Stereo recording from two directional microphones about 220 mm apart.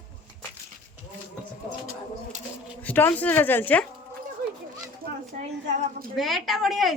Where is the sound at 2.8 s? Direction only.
10° left (ahead or behind).